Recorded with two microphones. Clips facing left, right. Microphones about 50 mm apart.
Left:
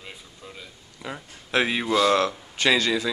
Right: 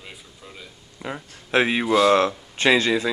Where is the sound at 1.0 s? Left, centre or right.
Right.